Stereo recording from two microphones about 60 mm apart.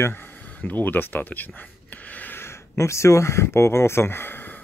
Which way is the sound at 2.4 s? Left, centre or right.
Left.